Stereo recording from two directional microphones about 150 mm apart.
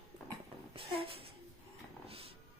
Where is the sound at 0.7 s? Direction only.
40° right (ahead or behind).